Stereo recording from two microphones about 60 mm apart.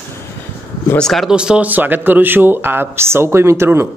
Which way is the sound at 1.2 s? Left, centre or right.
Centre.